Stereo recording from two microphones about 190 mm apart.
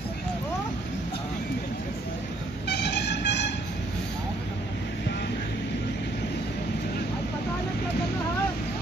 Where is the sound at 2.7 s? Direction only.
60° left (ahead or behind).